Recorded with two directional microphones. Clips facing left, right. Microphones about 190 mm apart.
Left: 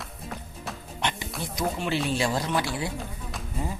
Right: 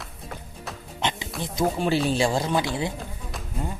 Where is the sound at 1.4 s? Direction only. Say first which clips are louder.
Right 5 dB; 30° right (ahead or behind).